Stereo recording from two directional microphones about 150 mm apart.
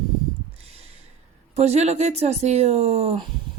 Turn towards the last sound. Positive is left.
turn(degrees=-45)  # may be behind; listen again after turning